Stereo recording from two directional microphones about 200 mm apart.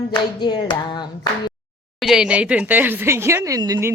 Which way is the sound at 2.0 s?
Centre (ahead or behind).